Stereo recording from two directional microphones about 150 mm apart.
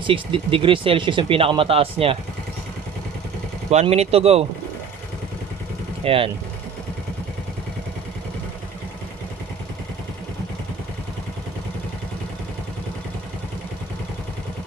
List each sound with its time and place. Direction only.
0.0 s speech: 35° right (ahead or behind)
3.8 s speech: 45° right (ahead or behind)
6.0 s speech: 40° right (ahead or behind)